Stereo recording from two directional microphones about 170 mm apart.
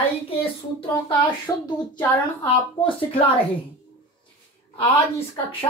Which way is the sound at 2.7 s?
30° left (ahead or behind).